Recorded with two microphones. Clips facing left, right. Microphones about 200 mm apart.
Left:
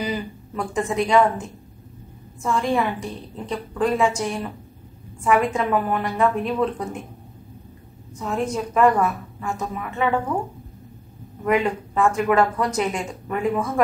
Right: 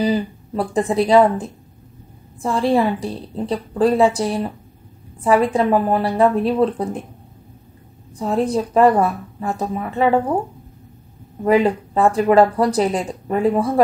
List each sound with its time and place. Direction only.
0.0 s speech: 35° right (ahead or behind)
8.2 s speech: 35° right (ahead or behind)
11.4 s speech: 35° right (ahead or behind)